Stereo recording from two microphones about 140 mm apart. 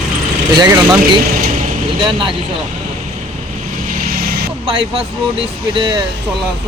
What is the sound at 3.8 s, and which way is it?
Vehicle, 90° right.